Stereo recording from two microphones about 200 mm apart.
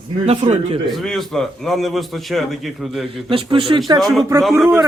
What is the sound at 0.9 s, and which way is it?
A man's voice, centre (ahead or behind).